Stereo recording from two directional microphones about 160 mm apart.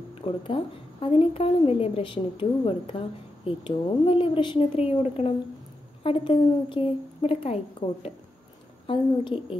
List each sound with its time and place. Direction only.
0.1 s a woman's voice: 35° left (ahead or behind)